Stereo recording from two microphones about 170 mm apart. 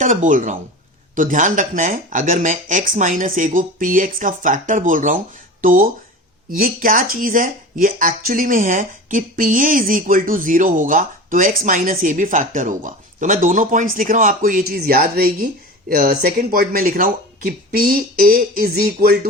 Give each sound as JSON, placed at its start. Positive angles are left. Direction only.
{"t": 0.0, "sound": "speech", "side_deg": -50}